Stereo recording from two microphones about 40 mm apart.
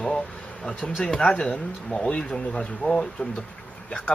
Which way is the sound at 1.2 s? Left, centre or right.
Left.